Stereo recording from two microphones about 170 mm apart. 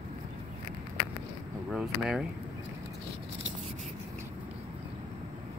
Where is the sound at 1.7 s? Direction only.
5° right (ahead or behind).